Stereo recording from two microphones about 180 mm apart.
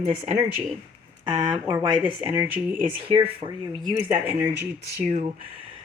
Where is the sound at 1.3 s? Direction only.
20° right (ahead or behind).